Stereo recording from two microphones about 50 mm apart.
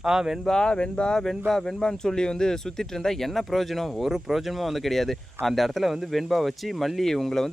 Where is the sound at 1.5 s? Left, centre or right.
Centre.